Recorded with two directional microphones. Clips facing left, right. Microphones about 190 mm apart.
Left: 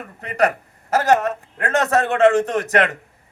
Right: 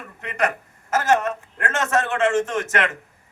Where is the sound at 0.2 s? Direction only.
35° left (ahead or behind).